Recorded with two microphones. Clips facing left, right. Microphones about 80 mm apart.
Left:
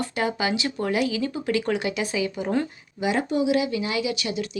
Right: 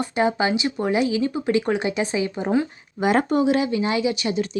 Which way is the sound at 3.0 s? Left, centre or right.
Right.